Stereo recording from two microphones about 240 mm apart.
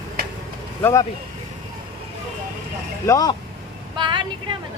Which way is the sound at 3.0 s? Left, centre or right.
Centre.